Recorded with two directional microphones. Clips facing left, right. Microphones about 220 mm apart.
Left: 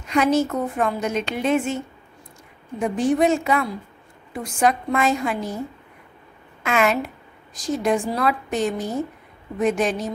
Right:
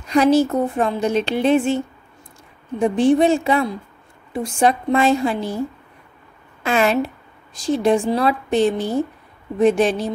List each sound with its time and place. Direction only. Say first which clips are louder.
0.1 s speech: right 4 dB; 35° right (ahead or behind)
2.8 s speech: right 4 dB; 30° right (ahead or behind)
6.6 s speech: right 3 dB; 30° right (ahead or behind)